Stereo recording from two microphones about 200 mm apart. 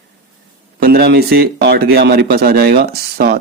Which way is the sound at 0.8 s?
50° right (ahead or behind).